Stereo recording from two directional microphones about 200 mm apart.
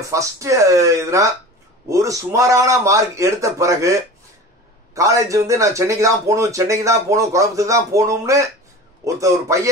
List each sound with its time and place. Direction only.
0.0 s speech: 15° right (ahead or behind)